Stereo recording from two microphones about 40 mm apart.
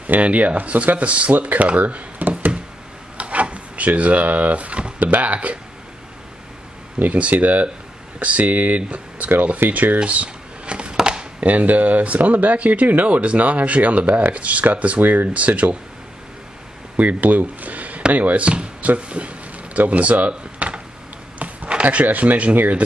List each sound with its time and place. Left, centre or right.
0.0 s speech: right
3.2 s wood: right
5.2 s speech: right
7.0 s speech: right
10.0 s a sound: right
11.4 s speech: right
15.0 s speech: right
15.2 s speech: right
16.9 s speech: right
18.8 s a sound: right
22.0 s speech: right